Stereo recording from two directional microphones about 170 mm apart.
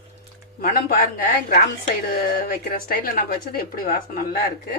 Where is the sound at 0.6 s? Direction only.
60° left (ahead or behind).